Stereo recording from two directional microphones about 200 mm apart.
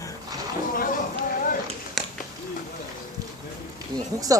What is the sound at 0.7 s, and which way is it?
Speech, 45° left (ahead or behind).